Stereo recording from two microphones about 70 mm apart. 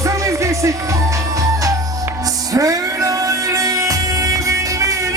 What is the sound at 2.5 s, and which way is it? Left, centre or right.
Music, right.